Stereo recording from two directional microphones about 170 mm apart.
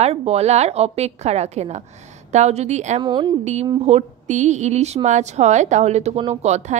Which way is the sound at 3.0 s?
25° right (ahead or behind).